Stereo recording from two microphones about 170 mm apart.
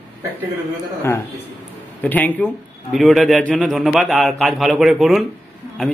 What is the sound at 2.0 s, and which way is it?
A man's voice, 10° left (ahead or behind).